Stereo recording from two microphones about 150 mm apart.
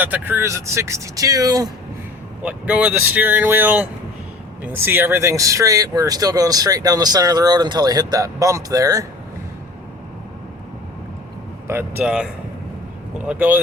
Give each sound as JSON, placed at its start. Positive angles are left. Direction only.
{"t": 0.0, "sound": "speech", "side_deg": -15}
{"t": 2.4, "sound": "speech", "side_deg": -10}
{"t": 11.7, "sound": "speech", "side_deg": -15}